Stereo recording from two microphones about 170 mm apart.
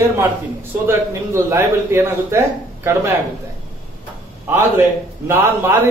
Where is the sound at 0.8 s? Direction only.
15° right (ahead or behind).